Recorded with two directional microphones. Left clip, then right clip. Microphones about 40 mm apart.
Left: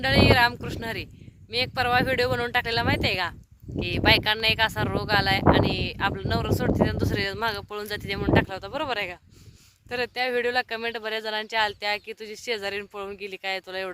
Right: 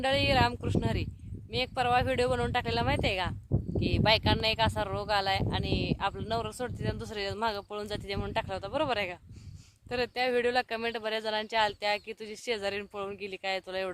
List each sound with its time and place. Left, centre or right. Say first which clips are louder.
0.0 s speech: left 7 dB; right
3.8 s speech: left 6 dB; centre